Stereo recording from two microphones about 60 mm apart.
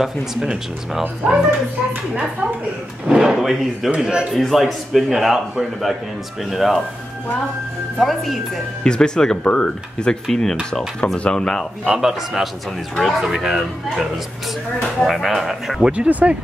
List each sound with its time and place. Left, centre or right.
0.0 s speech: centre
3.1 s a man's voice: centre
3.9 s speech: centre
4.4 s a man's voice: centre
8.0 s a man's voice: centre
8.8 s speech: centre
10.2 s a man's voice: centre
11.8 s a man's voice: centre
15.9 s speech: right